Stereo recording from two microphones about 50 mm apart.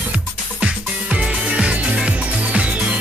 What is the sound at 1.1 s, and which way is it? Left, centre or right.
Music, centre.